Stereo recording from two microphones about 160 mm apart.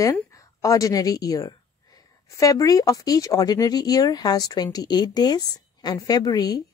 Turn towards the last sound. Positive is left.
turn(degrees=25)  # may be behind; listen again after turning